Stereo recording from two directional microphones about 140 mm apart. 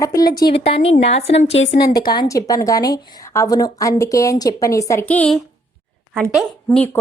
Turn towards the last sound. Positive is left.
turn(degrees=10)  # may be behind; listen again after turning